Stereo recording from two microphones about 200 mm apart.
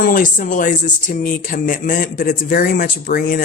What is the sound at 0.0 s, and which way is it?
Speech, 40° left (ahead or behind).